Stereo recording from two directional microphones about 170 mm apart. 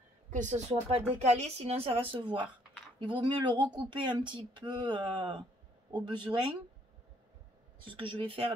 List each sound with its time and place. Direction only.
0.3 s speech: 45° right (ahead or behind); by 6.4 s 25° right (ahead or behind)
7.8 s speech: 30° right (ahead or behind)